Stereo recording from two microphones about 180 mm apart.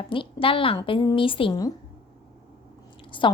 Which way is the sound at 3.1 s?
30° left (ahead or behind).